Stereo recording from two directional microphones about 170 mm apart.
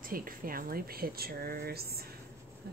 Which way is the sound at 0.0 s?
55° right (ahead or behind).